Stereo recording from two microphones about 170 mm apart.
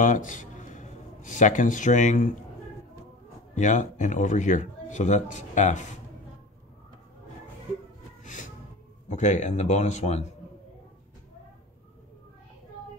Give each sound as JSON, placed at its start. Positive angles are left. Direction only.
{"t": 0.0, "sound": "a man's voice", "side_deg": 50}
{"t": 3.5, "sound": "speech", "side_deg": 45}
{"t": 8.2, "sound": "music", "side_deg": 50}
{"t": 9.1, "sound": "speech", "side_deg": 45}